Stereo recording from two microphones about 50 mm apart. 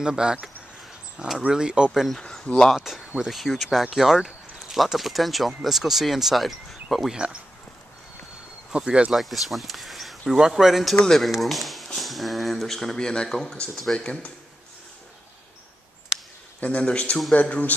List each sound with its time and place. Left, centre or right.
0.0 s speech: centre
1.9 s speech: centre
8.7 s speech: centre
9.1 s speech: centre
13.9 s a man's voice: left
16.6 s a man's voice: left